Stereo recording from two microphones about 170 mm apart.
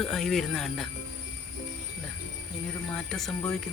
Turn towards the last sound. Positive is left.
turn(degrees=5)  # may be behind; listen again after turning